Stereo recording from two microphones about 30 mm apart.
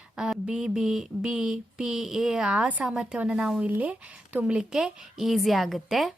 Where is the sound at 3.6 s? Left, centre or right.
Right.